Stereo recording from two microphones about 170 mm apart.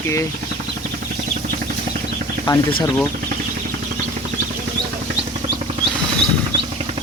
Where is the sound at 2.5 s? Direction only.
25° left (ahead or behind).